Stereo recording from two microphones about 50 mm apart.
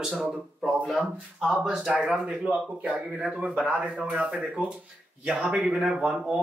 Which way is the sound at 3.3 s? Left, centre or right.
Right.